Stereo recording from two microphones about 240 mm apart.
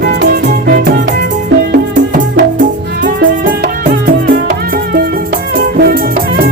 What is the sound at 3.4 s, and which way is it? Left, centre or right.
Music, right.